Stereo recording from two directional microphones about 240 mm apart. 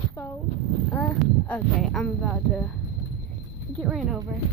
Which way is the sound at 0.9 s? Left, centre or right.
Centre.